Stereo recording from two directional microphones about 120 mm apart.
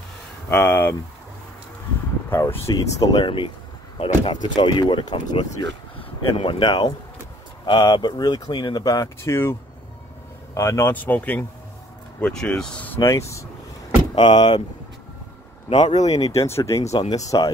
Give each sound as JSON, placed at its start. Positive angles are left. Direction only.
{"t": 0.5, "sound": "speech", "side_deg": 15}
{"t": 2.2, "sound": "speech", "side_deg": 20}
{"t": 14.1, "sound": "speech", "side_deg": 40}
{"t": 16.1, "sound": "speech", "side_deg": 25}
{"t": 16.8, "sound": "speech", "side_deg": 65}
{"t": 17.1, "sound": "speech", "side_deg": 30}